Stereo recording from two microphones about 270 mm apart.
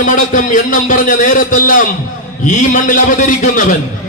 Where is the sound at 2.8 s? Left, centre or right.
Left.